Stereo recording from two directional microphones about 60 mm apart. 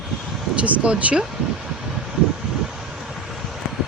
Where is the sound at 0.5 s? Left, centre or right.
Right.